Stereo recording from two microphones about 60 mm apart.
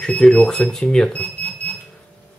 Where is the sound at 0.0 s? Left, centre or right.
Centre.